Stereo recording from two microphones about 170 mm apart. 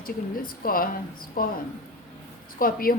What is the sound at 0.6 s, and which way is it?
Speech, 60° left (ahead or behind).